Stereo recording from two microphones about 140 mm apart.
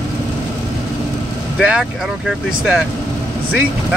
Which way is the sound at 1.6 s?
5° right (ahead or behind).